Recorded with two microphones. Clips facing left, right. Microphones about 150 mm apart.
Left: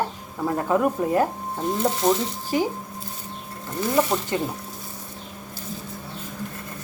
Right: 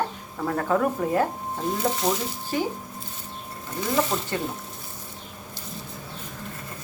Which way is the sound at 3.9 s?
15° left (ahead or behind).